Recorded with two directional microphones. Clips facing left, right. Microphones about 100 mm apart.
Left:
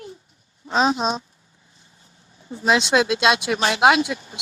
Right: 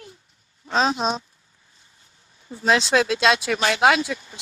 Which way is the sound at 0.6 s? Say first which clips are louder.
Left 1 dB; 15° left (ahead or behind).